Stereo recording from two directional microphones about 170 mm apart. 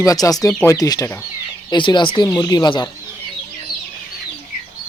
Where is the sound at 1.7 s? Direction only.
30° left (ahead or behind).